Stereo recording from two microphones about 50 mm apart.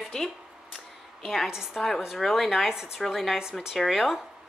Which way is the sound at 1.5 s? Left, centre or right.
Centre.